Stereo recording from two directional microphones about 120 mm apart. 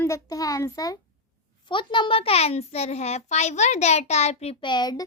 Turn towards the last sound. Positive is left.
turn(degrees=35)  # may be behind; listen again after turning